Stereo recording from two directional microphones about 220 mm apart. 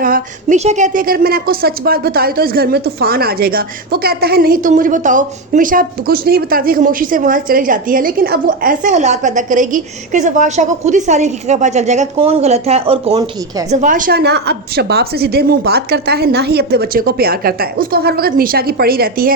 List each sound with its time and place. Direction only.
0.0 s a woman's voice: 35° right (ahead or behind); by 13.7 s 20° right (ahead or behind)
13.7 s a woman's voice: 35° right (ahead or behind)